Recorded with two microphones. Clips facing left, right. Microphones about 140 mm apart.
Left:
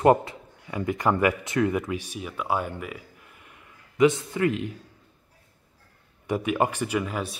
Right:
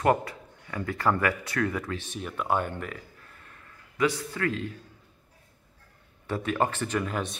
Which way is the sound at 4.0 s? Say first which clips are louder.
Left 6 dB; 20° left (ahead or behind).